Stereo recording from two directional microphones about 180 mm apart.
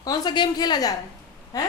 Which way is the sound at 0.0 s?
20° left (ahead or behind).